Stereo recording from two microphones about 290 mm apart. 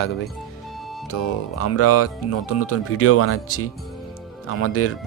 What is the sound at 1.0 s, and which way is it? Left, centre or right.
Speech, left.